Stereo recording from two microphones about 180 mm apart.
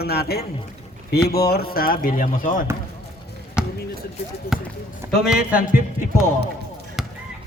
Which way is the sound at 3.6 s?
5° right (ahead or behind).